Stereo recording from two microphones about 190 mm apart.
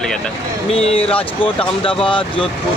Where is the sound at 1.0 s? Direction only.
5° left (ahead or behind).